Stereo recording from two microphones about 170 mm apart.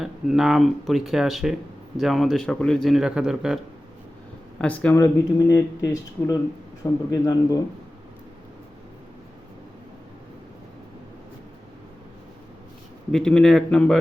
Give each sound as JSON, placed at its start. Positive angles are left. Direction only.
{"t": 0.0, "sound": "speech", "side_deg": 0}
{"t": 4.5, "sound": "speech", "side_deg": 10}
{"t": 4.9, "sound": "speech", "side_deg": 20}
{"t": 13.1, "sound": "speech", "side_deg": 5}